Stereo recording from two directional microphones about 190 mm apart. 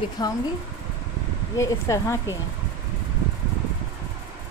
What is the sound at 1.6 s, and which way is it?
Speech, 15° left (ahead or behind).